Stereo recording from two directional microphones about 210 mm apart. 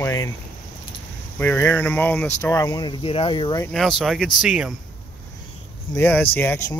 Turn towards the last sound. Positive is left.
turn(degrees=10)  # may be behind; listen again after turning